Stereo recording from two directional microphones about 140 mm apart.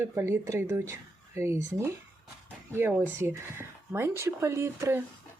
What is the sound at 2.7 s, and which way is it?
Speech, 15° right (ahead or behind).